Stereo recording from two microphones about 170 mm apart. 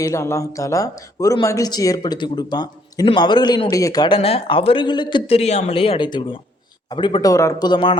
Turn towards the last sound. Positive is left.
turn(degrees=25)  # may be behind; listen again after turning